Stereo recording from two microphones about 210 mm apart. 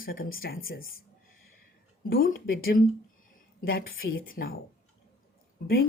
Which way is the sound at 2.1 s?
45° left (ahead or behind).